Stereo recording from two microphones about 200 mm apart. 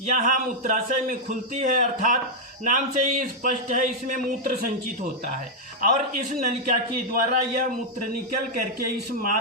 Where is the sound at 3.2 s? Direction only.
40° right (ahead or behind).